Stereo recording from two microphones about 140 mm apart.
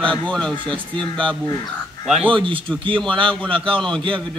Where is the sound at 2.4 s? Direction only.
40° right (ahead or behind).